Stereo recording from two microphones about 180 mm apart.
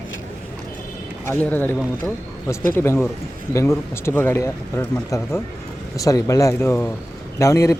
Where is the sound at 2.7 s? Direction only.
15° left (ahead or behind).